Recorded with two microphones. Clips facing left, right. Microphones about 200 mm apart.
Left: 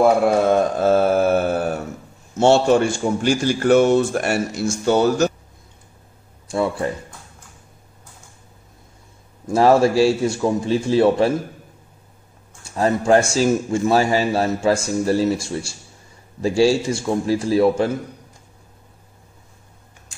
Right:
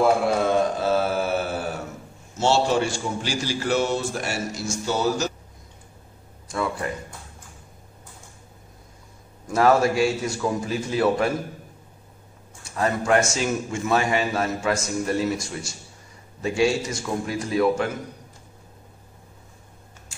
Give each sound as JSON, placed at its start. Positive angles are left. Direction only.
{"t": 0.5, "sound": "mantra", "side_deg": 50}
{"t": 2.3, "sound": "a man's voice", "side_deg": 55}
{"t": 6.5, "sound": "a man's voice", "side_deg": 30}
{"t": 9.5, "sound": "a man's voice", "side_deg": 30}
{"t": 12.7, "sound": "a man's voice", "side_deg": 30}